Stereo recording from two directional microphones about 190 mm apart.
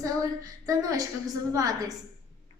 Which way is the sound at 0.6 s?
20° right (ahead or behind).